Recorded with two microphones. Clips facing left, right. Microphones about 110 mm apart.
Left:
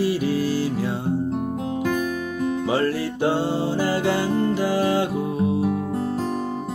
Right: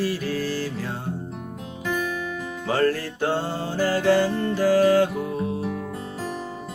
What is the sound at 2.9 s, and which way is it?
Music, 15° left (ahead or behind).